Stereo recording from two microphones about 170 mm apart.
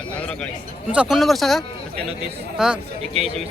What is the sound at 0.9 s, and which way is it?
Speech, 5° right (ahead or behind).